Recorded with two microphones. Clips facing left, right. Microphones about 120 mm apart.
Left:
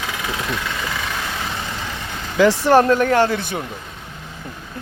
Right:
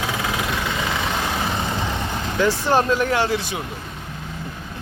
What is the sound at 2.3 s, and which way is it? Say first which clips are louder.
Speech: left 6 dB; 75° left (ahead or behind).